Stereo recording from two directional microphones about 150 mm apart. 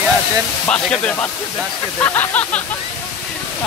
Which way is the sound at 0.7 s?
5° left (ahead or behind).